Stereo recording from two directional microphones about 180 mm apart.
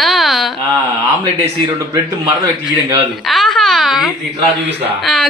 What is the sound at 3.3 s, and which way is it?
Speech, centre (ahead or behind).